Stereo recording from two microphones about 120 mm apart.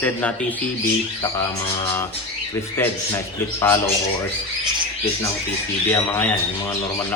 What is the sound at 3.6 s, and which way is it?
Speech, 20° left (ahead or behind).